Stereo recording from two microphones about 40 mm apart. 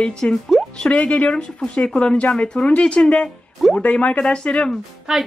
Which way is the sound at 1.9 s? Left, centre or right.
Left.